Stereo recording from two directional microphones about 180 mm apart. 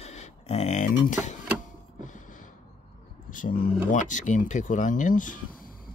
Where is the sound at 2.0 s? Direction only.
45° left (ahead or behind).